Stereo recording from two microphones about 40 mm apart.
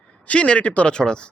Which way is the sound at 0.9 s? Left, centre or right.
Left.